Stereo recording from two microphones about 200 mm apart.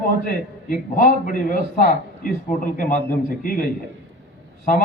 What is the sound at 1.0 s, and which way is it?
A man's voice, 45° left (ahead or behind).